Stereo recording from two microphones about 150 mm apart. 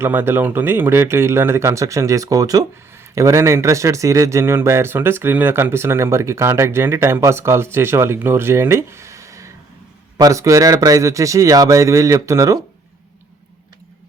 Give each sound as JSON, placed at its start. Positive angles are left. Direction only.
{"t": 0.0, "sound": "a man's voice", "side_deg": -15}